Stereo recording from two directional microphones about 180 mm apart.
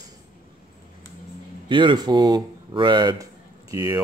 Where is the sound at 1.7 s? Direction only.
25° right (ahead or behind).